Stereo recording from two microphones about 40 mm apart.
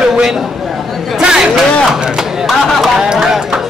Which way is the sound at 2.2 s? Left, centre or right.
Centre.